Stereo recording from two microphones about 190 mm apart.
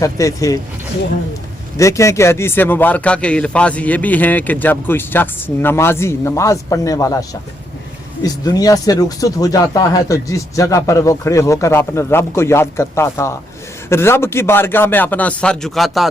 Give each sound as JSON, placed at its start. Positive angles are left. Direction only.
{"t": 0.0, "sound": "a man's voice", "side_deg": 15}
{"t": 1.8, "sound": "a man's voice", "side_deg": 15}